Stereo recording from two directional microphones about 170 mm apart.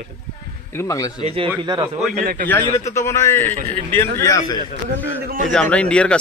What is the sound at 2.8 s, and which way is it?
A man's voice, 15° left (ahead or behind).